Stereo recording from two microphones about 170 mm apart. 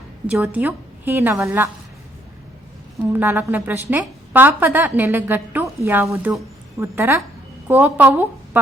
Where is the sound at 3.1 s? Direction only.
10° right (ahead or behind).